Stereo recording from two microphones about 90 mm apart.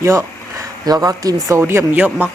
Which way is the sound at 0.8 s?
45° right (ahead or behind).